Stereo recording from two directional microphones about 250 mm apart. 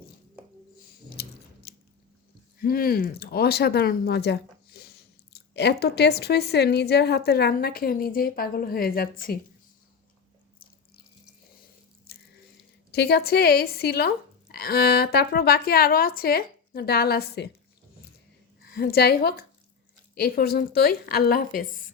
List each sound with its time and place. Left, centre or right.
1.1 s a sound: left
2.6 s speech: left
12.1 s drip: left
12.9 s speech: left
18.7 s speech: left